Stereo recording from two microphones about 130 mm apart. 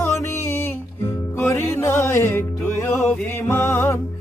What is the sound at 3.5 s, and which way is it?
Music, 20° left (ahead or behind).